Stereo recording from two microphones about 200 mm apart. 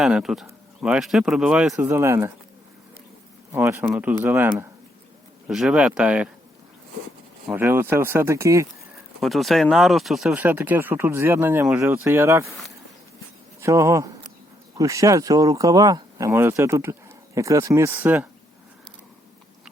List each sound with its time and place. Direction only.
0.0 s speech: 5° right (ahead or behind)
3.5 s speech: 15° right (ahead or behind)
7.4 s speech: 10° right (ahead or behind)
9.2 s speech: centre (ahead or behind)
13.6 s speech: 15° right (ahead or behind)